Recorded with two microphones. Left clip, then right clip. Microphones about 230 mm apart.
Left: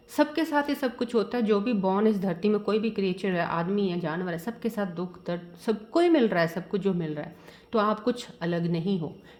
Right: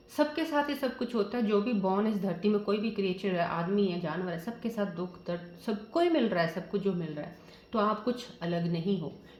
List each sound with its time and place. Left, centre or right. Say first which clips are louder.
0.2 s speech: left 4 dB; left